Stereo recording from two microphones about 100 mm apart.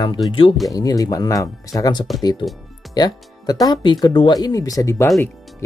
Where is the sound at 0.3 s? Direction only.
60° left (ahead or behind).